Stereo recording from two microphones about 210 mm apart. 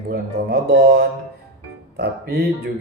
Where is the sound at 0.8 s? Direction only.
50° right (ahead or behind).